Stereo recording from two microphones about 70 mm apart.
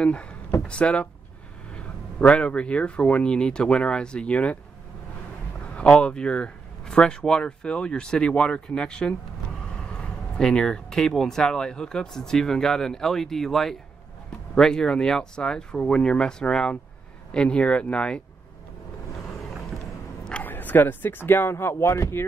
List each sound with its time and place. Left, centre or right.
0.0 s speech: centre
5.8 s speech: centre
20.4 s speech: left